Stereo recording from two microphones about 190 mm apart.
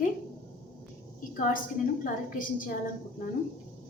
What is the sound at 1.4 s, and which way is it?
A woman's voice, 45° left (ahead or behind).